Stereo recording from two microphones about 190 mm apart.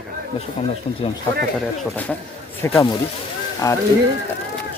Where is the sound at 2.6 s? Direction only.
15° left (ahead or behind).